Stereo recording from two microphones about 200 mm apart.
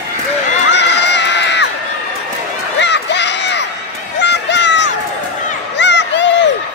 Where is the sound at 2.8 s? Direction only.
60° left (ahead or behind).